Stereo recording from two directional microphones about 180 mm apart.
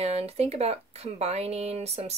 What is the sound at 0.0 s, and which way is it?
Speech, 35° right (ahead or behind).